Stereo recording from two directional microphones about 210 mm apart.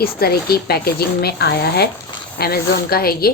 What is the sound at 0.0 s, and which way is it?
A woman's voice, 45° left (ahead or behind).